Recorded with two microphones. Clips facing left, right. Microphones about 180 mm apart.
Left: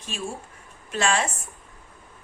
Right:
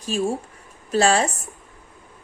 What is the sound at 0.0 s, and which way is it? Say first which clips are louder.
A woman's voice: right 10 dB; 40° right (ahead or behind).